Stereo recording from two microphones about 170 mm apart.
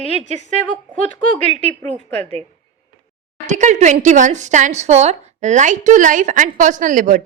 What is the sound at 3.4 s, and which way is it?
A woman's voice, 45° right (ahead or behind).